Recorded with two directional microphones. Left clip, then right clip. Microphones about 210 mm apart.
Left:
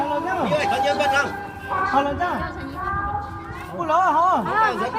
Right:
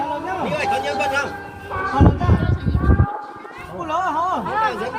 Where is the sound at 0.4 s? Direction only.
15° left (ahead or behind).